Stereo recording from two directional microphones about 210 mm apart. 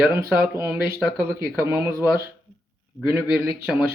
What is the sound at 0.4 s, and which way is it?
A man's voice, 10° right (ahead or behind).